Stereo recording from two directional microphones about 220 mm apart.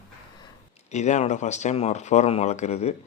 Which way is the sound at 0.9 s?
30° left (ahead or behind).